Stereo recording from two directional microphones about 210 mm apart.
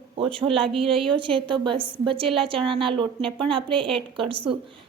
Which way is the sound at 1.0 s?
25° right (ahead or behind).